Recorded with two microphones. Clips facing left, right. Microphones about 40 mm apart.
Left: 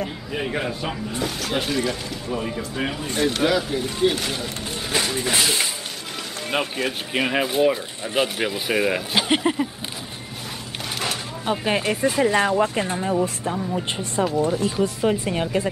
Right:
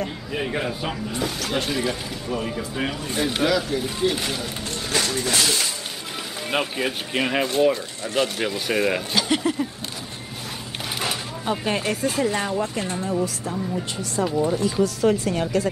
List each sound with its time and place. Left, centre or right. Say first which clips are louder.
0.0 s speech: even; centre
3.4 s speech: left 1 dB; centre
4.9 s speech: left 1 dB; centre
6.5 s speech: even; centre
9.1 s speech: left 2 dB; left
11.6 s speech: left 4 dB; centre
12.8 s speech: left 2 dB; centre